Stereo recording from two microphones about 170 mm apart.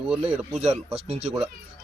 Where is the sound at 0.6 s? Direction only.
40° right (ahead or behind).